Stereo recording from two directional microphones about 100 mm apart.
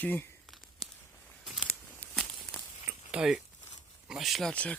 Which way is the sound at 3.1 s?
10° right (ahead or behind).